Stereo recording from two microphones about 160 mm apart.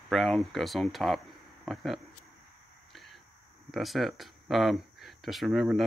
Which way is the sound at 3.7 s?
Centre (ahead or behind).